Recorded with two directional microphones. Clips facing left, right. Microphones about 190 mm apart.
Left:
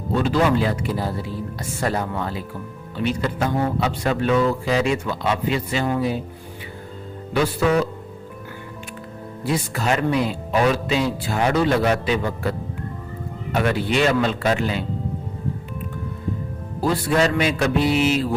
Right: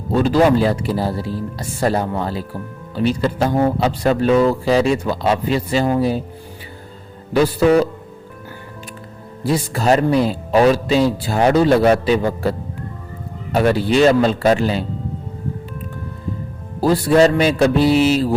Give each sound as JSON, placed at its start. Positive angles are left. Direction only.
{"t": 0.1, "sound": "speech", "side_deg": -35}
{"t": 7.3, "sound": "speech", "side_deg": -35}
{"t": 9.4, "sound": "speech", "side_deg": -35}
{"t": 16.8, "sound": "speech", "side_deg": -35}